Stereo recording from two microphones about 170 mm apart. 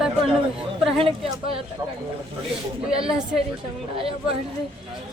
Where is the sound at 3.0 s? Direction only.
5° right (ahead or behind).